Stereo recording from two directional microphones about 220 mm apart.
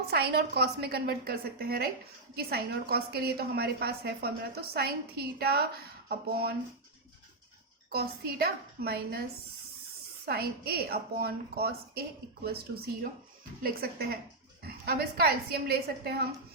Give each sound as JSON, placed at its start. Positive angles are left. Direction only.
{"t": 0.0, "sound": "a woman's voice", "side_deg": -45}
{"t": 7.9, "sound": "a woman's voice", "side_deg": -45}
{"t": 10.2, "sound": "a woman's voice", "side_deg": -45}